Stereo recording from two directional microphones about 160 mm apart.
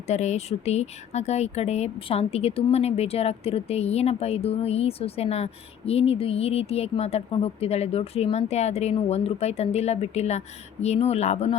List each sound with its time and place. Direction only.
0.1 s speech: 45° left (ahead or behind)